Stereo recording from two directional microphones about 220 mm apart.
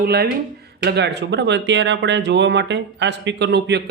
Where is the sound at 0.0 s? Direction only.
45° right (ahead or behind).